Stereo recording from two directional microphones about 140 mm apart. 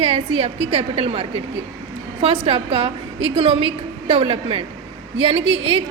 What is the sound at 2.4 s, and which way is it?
A woman's voice, 45° right (ahead or behind).